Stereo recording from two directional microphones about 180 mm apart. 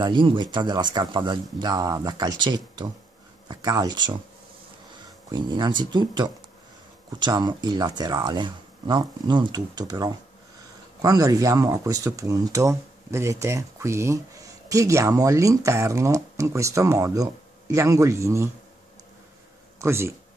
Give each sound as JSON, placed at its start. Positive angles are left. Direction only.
{"t": 0.0, "sound": "speech", "side_deg": -25}
{"t": 5.3, "sound": "speech", "side_deg": -25}
{"t": 19.8, "sound": "speech", "side_deg": -15}